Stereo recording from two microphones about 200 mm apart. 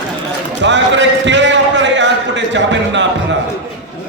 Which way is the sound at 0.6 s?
65° right (ahead or behind).